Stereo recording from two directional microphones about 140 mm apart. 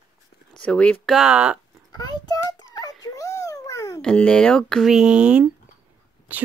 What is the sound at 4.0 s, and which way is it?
Speech, 5° left (ahead or behind).